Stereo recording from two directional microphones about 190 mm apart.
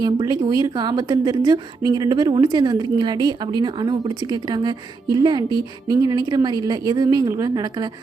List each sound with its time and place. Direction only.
0.0 s a woman's voice: 20° right (ahead or behind)